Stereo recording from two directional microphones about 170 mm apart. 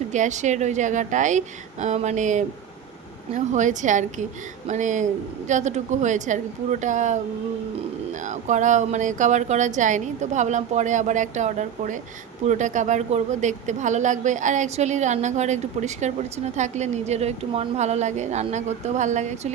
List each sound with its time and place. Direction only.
0.1 s speech: 45° right (ahead or behind)
8.2 s speech: 45° right (ahead or behind)